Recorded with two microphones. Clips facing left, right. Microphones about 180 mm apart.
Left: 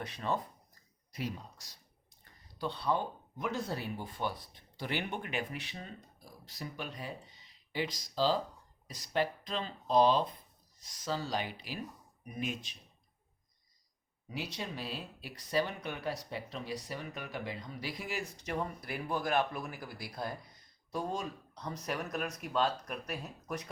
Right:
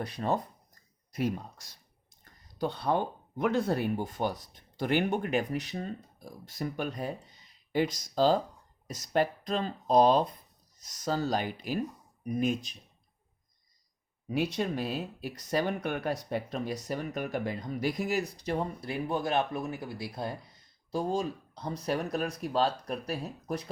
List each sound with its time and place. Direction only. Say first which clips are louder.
0.0 s speech: right 5 dB; 40° right (ahead or behind)
1.1 s speech: right 8 dB; 50° right (ahead or behind)
14.3 s speech: right 10 dB; 55° right (ahead or behind); by 23.6 s 35° right (ahead or behind)